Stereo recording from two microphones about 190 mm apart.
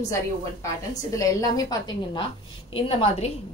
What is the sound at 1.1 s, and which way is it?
A woman's voice, 20° left (ahead or behind).